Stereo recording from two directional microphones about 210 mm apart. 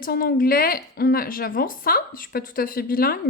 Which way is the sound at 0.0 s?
45° left (ahead or behind).